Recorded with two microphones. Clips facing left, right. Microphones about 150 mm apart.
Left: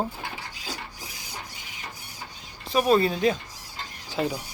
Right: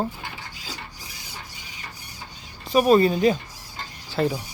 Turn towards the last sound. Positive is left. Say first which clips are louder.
# right 4 dB
turn(degrees=5)  # may be behind; listen again after turning